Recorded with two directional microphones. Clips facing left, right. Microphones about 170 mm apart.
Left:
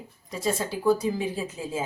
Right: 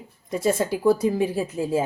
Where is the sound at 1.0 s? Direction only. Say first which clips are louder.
Right 6 dB; 60° right (ahead or behind).